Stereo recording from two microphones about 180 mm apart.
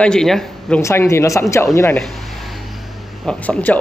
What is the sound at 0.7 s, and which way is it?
Speech, 15° left (ahead or behind).